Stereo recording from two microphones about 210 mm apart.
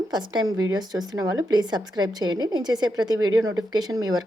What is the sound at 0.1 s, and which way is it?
A woman's voice, 20° right (ahead or behind).